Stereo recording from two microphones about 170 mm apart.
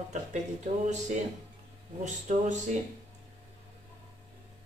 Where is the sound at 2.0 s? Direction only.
45° right (ahead or behind).